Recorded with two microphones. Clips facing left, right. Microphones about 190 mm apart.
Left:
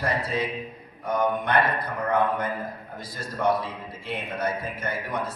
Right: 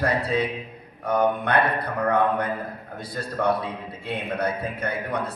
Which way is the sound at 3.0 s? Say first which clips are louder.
Right 4 dB; 60° right (ahead or behind).